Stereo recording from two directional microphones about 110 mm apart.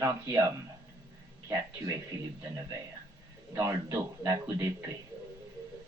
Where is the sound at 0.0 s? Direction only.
25° right (ahead or behind).